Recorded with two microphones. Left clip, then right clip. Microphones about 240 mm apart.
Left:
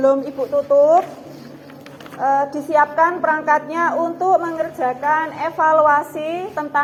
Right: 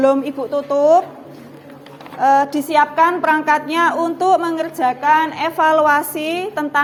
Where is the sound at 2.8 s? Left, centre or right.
Right.